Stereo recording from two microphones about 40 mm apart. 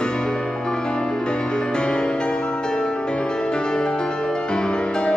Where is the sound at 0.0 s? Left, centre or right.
Left.